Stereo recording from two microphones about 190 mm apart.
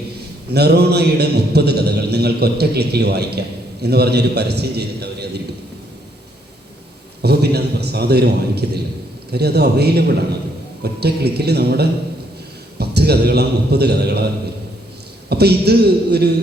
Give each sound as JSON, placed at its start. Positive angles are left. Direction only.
{"t": 0.5, "sound": "a man's voice", "side_deg": -60}
{"t": 7.2, "sound": "a man's voice", "side_deg": -60}
{"t": 15.3, "sound": "a man's voice", "side_deg": -60}